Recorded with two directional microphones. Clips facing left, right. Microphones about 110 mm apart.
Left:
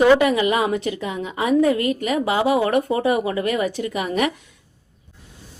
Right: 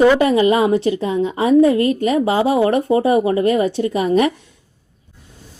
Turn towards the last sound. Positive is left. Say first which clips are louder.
# right 6 dB
turn(degrees=-30)  # may be behind; listen again after turning